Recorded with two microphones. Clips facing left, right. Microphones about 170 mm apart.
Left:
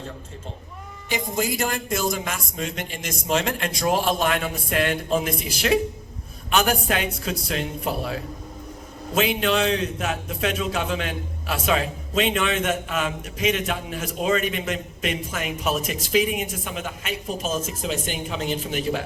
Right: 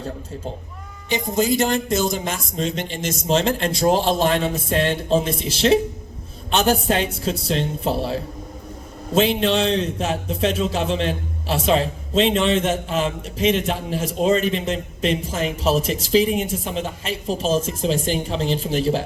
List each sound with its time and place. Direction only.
1.1 s a man's voice: 20° right (ahead or behind)